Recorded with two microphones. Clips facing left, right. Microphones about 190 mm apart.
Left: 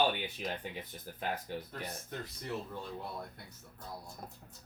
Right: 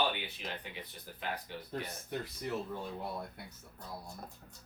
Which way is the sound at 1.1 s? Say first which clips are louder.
Left 3 dB; 45° left (ahead or behind).